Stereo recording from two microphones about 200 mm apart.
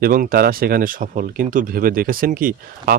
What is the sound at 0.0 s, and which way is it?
Speech, 45° right (ahead or behind).